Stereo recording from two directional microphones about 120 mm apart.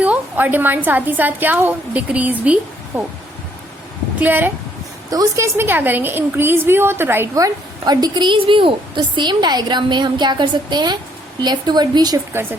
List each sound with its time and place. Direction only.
0.0 s a woman's voice: 10° right (ahead or behind)
4.2 s a woman's voice: 15° right (ahead or behind); by 12.2 s 35° right (ahead or behind)
12.3 s a woman's voice: 20° right (ahead or behind)